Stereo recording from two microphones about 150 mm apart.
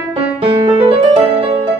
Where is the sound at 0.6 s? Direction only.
40° right (ahead or behind).